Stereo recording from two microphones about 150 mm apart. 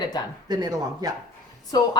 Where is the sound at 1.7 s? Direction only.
25° left (ahead or behind).